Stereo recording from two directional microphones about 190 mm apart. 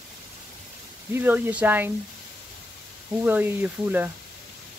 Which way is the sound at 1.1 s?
10° right (ahead or behind).